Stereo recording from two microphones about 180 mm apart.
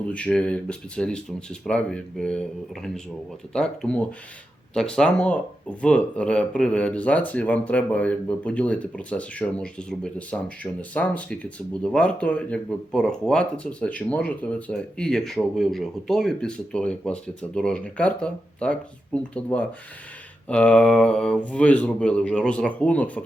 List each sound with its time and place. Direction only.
0.0 s speech: 5° left (ahead or behind)